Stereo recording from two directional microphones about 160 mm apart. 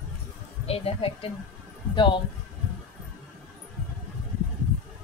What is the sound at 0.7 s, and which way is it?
Speech, 40° left (ahead or behind).